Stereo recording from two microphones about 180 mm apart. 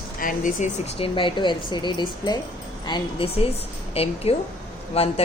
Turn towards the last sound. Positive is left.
turn(degrees=35)  # may be behind; listen again after turning